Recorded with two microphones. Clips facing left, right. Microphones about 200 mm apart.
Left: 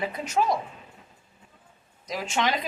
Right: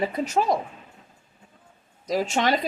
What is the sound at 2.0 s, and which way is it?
Speech, 40° right (ahead or behind).